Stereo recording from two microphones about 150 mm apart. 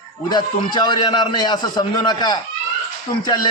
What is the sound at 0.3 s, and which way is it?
A man's voice, 30° left (ahead or behind).